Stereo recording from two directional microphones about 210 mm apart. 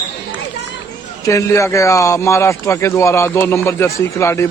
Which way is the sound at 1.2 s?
15° left (ahead or behind).